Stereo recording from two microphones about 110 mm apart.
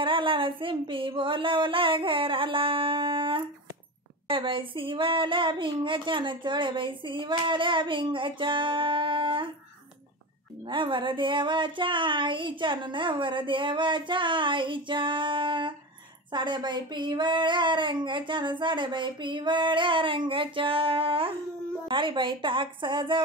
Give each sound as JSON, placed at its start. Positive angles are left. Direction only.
{"t": 0.0, "sound": "speech", "side_deg": -50}
{"t": 10.7, "sound": "speech", "side_deg": -50}